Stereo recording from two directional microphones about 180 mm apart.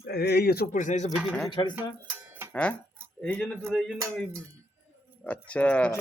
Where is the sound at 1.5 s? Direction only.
25° left (ahead or behind).